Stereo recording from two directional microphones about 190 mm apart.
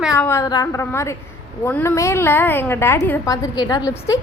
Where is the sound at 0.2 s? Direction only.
15° left (ahead or behind).